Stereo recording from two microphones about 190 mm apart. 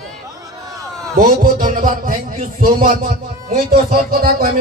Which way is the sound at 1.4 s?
45° right (ahead or behind).